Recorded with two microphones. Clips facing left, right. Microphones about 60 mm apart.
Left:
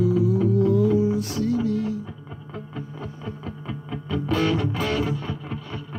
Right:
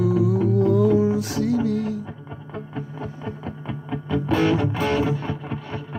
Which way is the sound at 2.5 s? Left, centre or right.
Right.